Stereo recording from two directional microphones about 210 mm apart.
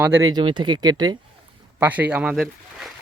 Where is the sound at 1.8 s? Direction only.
5° right (ahead or behind).